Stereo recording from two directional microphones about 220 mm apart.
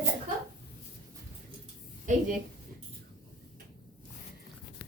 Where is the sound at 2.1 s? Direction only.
35° right (ahead or behind).